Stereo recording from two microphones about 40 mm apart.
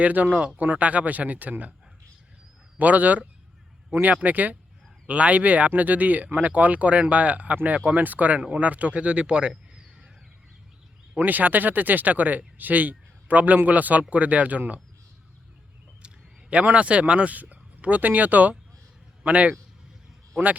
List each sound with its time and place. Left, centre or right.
0.0 s speech: right
2.7 s speech: right
11.3 s speech: right
16.0 s speech: right